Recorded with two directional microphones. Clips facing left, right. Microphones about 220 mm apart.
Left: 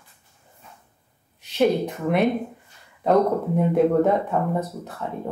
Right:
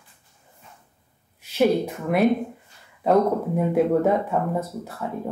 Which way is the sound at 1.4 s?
5° right (ahead or behind).